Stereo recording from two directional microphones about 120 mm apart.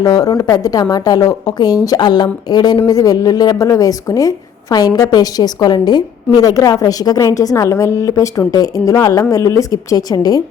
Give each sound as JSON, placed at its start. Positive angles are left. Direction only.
{"t": 0.0, "sound": "a woman's voice", "side_deg": 30}